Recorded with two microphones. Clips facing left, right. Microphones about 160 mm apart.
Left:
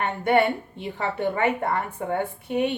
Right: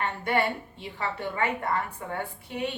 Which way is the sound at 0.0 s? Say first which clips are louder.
Left 6 dB; 55° left (ahead or behind).